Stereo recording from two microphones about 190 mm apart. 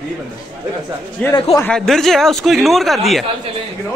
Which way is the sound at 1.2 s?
5° left (ahead or behind).